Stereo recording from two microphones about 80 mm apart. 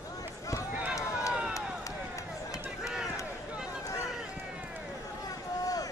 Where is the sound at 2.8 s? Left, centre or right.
Centre.